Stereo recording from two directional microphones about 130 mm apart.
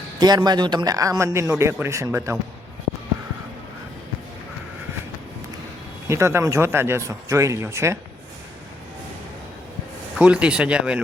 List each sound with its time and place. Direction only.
0.2 s a man's voice: 30° right (ahead or behind)
6.1 s a man's voice: 20° right (ahead or behind)
10.2 s speech: 10° right (ahead or behind)